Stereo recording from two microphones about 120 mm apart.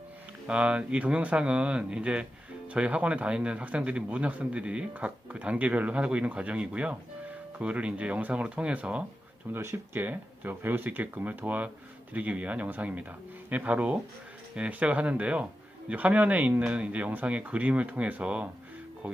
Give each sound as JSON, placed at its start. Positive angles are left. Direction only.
{"t": 0.4, "sound": "speech", "side_deg": -10}
{"t": 9.5, "sound": "speech", "side_deg": -20}